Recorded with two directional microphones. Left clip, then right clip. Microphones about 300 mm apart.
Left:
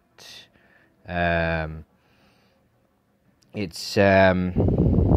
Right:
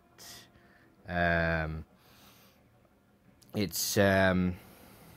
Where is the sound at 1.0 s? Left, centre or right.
Centre.